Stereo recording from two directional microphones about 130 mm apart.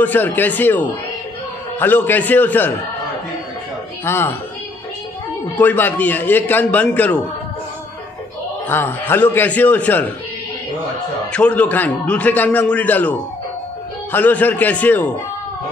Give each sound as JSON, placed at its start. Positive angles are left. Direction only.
{"t": 0.0, "sound": "a man's voice", "side_deg": 15}
{"t": 4.0, "sound": "a man's voice", "side_deg": 20}
{"t": 5.6, "sound": "a man's voice", "side_deg": 15}
{"t": 8.6, "sound": "a man's voice", "side_deg": 15}
{"t": 11.3, "sound": "a man's voice", "side_deg": 10}
{"t": 14.1, "sound": "a man's voice", "side_deg": 15}